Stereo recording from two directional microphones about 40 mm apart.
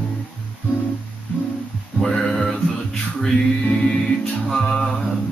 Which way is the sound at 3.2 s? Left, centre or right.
Centre.